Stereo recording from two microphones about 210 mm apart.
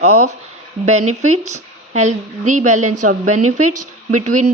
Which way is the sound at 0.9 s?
90° right.